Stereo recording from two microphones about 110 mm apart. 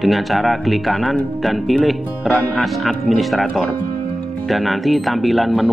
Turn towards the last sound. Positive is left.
turn(degrees=0)  # may be behind; listen again after turning